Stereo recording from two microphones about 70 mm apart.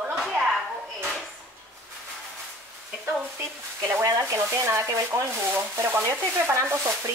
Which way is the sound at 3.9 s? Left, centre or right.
Right.